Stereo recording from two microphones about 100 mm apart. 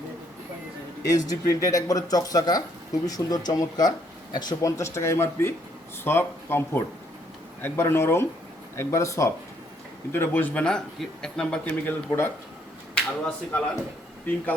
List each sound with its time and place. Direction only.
1.1 s speech: 40° left (ahead or behind)
4.8 s speech: 30° left (ahead or behind)
10.1 s speech: 20° left (ahead or behind)
11.6 s speech: 20° left (ahead or behind)
13.0 s speech: 10° left (ahead or behind)